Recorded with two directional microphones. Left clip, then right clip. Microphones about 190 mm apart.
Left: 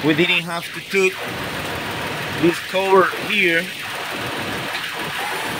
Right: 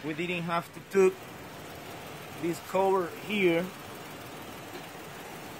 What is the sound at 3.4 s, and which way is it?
Speech, 10° right (ahead or behind).